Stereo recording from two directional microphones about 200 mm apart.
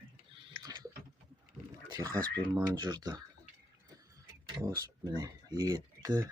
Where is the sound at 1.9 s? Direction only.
15° right (ahead or behind).